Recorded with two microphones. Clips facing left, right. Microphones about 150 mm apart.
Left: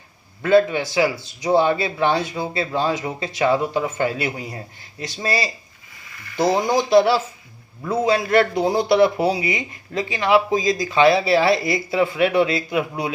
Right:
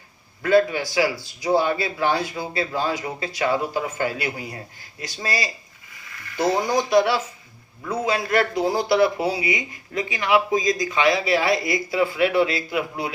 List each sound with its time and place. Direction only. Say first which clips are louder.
0.4 s a man's voice: left 2 dB; 25° left (ahead or behind)
6.5 s a man's voice: left 3 dB; 25° left (ahead or behind)